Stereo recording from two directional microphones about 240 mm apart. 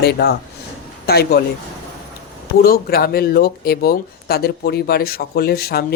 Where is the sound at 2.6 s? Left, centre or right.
Left.